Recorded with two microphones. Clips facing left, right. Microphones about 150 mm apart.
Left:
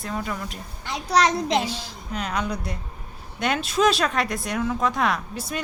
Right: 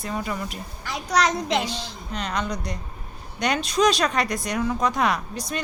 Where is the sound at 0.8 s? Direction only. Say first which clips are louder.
Left 2 dB; 30° left (ahead or behind).